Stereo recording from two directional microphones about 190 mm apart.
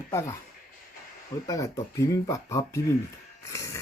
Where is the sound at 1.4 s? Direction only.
15° left (ahead or behind).